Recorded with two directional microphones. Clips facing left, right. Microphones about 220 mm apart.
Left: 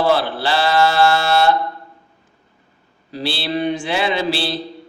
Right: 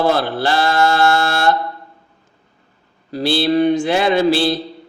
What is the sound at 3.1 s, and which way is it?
A man's voice, 45° right (ahead or behind).